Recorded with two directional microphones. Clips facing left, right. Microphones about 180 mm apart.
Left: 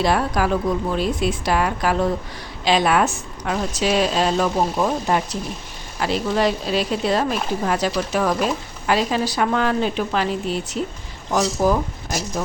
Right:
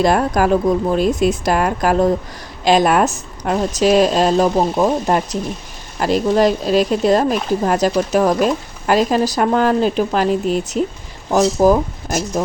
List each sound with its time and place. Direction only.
0.0 s speech: 45° right (ahead or behind)